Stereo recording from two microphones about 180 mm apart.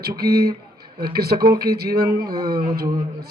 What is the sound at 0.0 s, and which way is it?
Speech, 60° right (ahead or behind).